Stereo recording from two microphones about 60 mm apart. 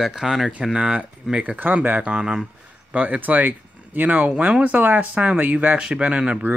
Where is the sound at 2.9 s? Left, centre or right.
Right.